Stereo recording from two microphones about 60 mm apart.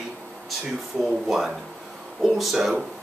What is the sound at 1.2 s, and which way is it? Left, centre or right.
Speech, centre.